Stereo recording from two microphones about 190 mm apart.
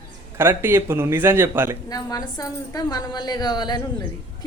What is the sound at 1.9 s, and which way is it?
A woman's voice, 20° left (ahead or behind).